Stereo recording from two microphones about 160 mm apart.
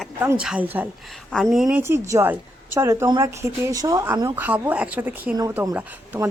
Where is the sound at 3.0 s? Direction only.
30° right (ahead or behind); by 6.3 s 10° right (ahead or behind).